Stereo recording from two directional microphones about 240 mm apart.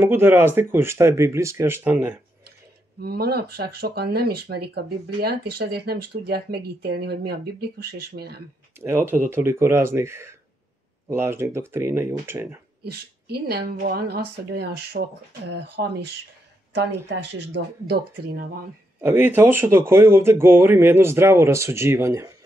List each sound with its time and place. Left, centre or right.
0.0 s speech: centre
3.0 s speech: right
8.7 s speech: centre
12.9 s speech: right
18.9 s speech: centre